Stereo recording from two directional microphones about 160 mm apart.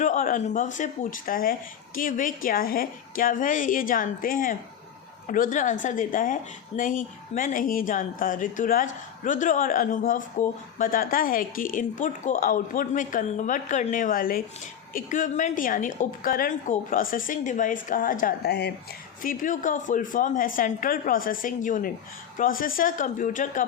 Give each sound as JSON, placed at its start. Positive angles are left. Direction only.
{"t": 0.0, "sound": "a woman's voice", "side_deg": 55}
{"t": 19.2, "sound": "a woman's voice", "side_deg": 55}